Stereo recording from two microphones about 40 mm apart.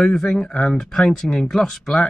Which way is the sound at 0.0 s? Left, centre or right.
Centre.